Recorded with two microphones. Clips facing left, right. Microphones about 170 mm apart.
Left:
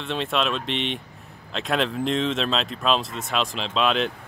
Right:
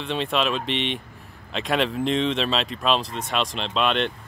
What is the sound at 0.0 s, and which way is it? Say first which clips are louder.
Speech: right 1 dB; centre (ahead or behind).